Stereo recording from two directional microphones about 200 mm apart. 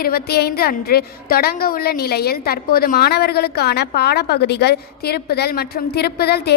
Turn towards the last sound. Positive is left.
turn(degrees=55)  # may be behind; listen again after turning